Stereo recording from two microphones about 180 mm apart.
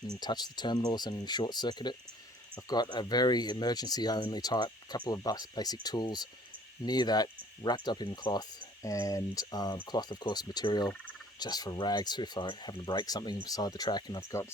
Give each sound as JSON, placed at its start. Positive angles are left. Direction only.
{"t": 0.2, "sound": "speech", "side_deg": 25}